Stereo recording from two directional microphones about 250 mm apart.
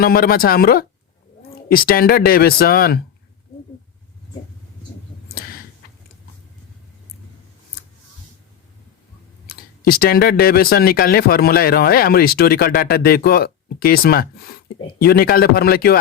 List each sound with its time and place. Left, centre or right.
0.0 s speech: left
9.5 s speech: left